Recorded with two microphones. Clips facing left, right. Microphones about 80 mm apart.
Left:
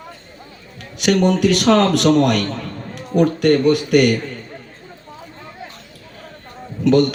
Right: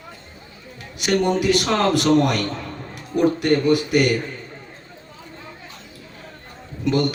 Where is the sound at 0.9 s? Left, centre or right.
Left.